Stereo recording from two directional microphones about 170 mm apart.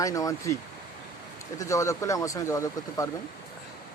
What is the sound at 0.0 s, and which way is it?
Speech, 20° left (ahead or behind).